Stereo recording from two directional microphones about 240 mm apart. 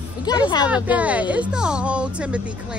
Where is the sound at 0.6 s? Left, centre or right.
Centre.